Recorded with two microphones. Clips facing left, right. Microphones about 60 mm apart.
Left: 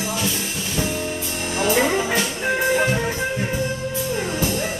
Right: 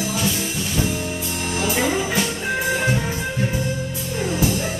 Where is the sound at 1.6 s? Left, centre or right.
Left.